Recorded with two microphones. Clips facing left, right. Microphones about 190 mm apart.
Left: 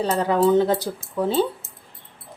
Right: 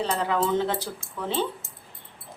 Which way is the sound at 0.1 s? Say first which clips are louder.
Left 10 dB; 40° left (ahead or behind).